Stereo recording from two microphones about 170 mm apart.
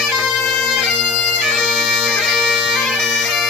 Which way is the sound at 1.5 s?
Centre (ahead or behind).